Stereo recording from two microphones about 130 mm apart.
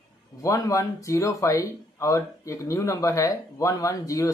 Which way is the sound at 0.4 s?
25° left (ahead or behind).